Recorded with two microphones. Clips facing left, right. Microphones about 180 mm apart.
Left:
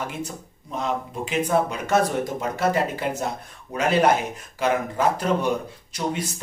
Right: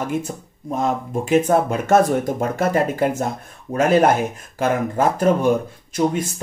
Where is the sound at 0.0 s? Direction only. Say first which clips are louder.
Right 7 dB; 50° right (ahead or behind).